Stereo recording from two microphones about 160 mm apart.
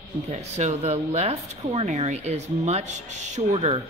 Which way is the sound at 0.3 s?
45° right (ahead or behind).